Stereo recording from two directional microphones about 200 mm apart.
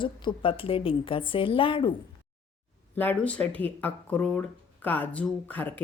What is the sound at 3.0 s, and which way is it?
Speech, 10° left (ahead or behind).